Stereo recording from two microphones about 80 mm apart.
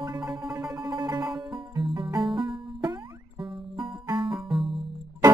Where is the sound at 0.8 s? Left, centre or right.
Right.